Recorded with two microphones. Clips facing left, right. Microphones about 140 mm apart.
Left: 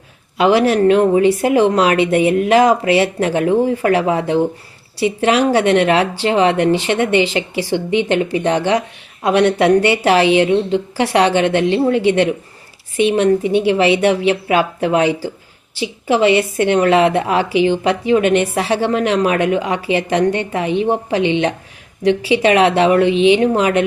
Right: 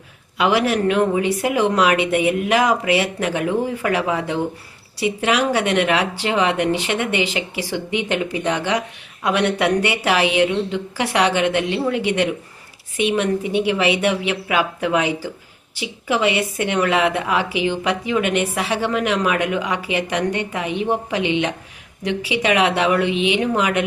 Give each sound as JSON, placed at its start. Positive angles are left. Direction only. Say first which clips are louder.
{"t": 0.3, "sound": "a woman's voice", "louder": "left 5 dB", "side_deg": 30}